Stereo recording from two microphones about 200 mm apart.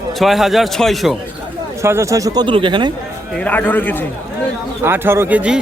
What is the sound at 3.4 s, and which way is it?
Speech, 10° left (ahead or behind).